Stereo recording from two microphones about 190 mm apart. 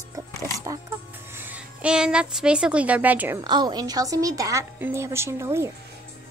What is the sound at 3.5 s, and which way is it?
A woman's voice, 20° right (ahead or behind).